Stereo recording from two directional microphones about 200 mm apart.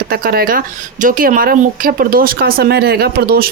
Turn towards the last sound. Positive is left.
turn(degrees=-50)  # may be behind; listen again after turning